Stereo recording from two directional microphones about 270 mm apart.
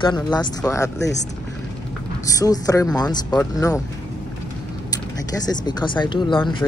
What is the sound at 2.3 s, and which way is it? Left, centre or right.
Speech, centre.